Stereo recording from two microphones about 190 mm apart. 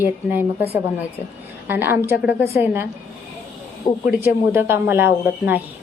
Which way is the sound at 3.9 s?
20° left (ahead or behind).